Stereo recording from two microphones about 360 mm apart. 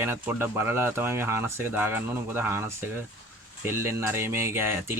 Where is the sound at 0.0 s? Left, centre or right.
Centre.